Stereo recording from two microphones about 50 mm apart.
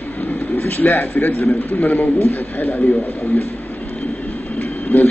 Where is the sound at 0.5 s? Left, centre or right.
Left.